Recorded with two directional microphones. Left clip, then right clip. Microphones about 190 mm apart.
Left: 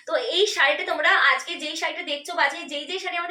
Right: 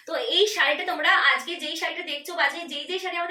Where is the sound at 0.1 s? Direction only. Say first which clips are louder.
Left 1 dB; 20° right (ahead or behind).